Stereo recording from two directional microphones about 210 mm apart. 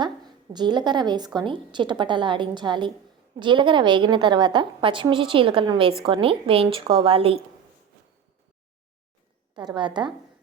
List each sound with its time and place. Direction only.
0.0 s a woman's voice: 20° right (ahead or behind)
9.6 s a woman's voice: 20° right (ahead or behind)